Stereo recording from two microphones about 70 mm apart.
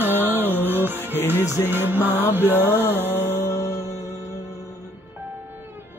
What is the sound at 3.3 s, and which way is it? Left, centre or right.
Music, left.